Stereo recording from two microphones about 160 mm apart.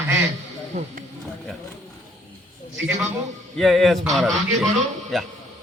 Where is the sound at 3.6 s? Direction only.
Centre (ahead or behind).